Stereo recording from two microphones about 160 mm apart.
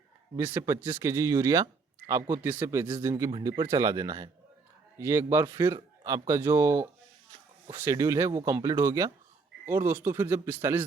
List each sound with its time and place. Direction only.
0.3 s speech: 15° right (ahead or behind)